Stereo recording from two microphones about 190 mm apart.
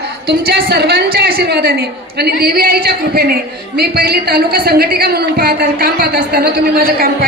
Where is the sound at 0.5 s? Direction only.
60° right (ahead or behind).